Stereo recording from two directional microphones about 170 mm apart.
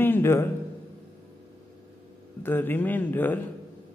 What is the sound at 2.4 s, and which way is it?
A man's voice, 10° left (ahead or behind).